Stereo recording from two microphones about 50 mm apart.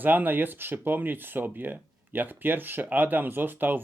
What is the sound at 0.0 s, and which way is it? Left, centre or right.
Speech, right.